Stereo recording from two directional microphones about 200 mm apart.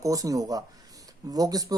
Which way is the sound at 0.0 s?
15° right (ahead or behind).